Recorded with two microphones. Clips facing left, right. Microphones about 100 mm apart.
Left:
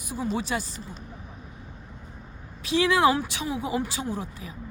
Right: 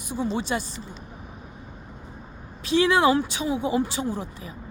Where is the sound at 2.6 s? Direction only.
25° right (ahead or behind).